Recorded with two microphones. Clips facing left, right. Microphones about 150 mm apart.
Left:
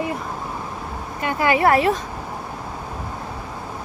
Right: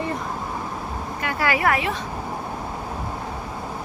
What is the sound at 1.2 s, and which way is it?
Speech, 20° left (ahead or behind).